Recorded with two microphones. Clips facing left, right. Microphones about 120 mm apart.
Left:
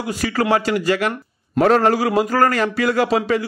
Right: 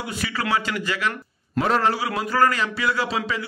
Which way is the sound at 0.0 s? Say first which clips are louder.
Left 7 dB; 40° left (ahead or behind).